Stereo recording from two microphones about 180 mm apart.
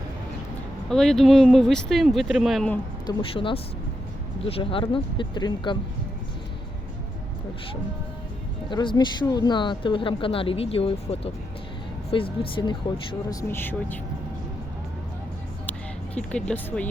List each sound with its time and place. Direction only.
0.9 s speech: 5° left (ahead or behind)
3.1 s speech: 30° left (ahead or behind)
8.7 s speech: 25° left (ahead or behind)
13.3 s speech: 15° left (ahead or behind)
16.1 s speech: 5° left (ahead or behind)